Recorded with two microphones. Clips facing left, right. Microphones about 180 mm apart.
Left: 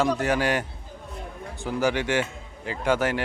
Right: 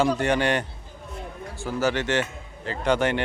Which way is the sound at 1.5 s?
15° left (ahead or behind).